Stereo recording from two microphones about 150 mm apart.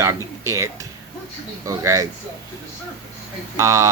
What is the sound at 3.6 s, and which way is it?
Speech, 20° right (ahead or behind).